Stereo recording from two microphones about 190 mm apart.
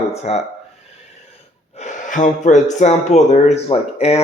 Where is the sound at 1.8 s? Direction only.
40° left (ahead or behind).